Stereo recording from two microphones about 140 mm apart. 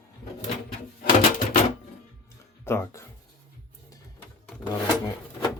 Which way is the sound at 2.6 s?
20° left (ahead or behind).